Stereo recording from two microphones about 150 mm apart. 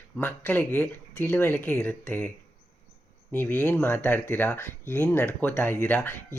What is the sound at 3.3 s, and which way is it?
Speech, 10° left (ahead or behind).